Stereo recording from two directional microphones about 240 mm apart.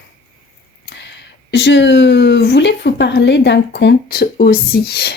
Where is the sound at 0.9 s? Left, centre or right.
Left.